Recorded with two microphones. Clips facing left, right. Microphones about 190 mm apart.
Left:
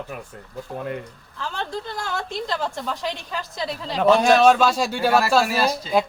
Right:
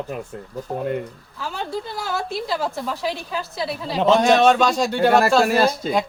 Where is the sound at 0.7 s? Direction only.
40° right (ahead or behind).